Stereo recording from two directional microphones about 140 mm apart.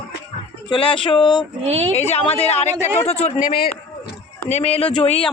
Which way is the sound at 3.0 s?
50° left (ahead or behind).